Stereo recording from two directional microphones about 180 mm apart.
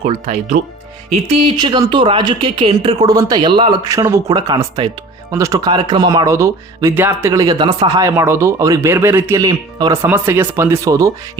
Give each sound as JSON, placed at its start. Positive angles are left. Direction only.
{"t": 0.0, "sound": "a woman's voice", "side_deg": -35}